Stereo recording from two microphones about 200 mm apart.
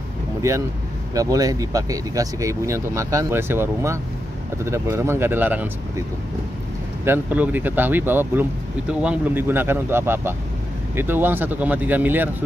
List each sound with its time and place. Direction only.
0.4 s speech: 15° right (ahead or behind)
7.1 s speech: 10° right (ahead or behind)